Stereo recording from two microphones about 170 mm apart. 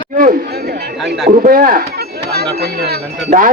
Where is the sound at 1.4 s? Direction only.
55° right (ahead or behind).